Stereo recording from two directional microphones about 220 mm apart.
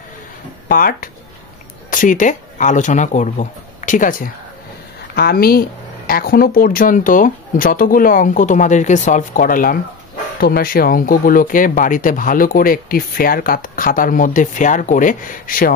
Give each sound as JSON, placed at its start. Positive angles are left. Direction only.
{"t": 0.7, "sound": "speech", "side_deg": 40}